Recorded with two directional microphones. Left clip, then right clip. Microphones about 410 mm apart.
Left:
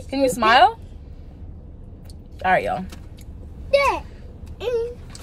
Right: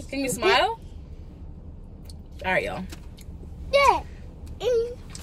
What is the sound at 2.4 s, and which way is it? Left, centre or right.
Speech, centre.